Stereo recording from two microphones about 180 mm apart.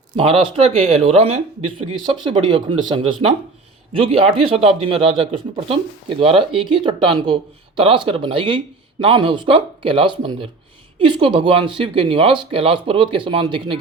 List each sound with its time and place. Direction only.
0.2 s speech: 30° right (ahead or behind)